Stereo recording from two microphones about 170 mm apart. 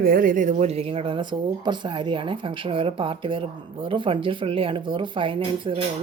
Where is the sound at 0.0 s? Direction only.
55° right (ahead or behind).